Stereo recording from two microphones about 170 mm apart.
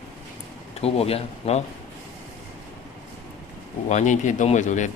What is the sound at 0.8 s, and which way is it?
Speech, 35° left (ahead or behind).